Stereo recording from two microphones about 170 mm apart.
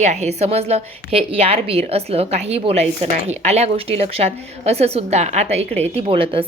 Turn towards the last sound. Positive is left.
turn(degrees=-30)  # may be behind; listen again after turning